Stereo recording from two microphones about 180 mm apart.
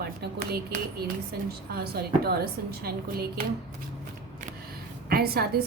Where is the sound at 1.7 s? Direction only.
60° right (ahead or behind).